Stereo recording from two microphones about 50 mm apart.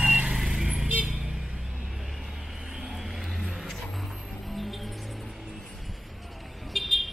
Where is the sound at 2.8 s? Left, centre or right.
Centre.